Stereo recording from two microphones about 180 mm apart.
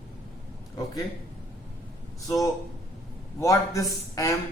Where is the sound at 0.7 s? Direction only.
20° left (ahead or behind).